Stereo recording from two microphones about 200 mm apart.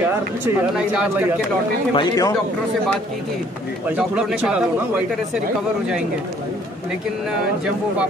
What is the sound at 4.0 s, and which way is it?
Speech, 5° right (ahead or behind).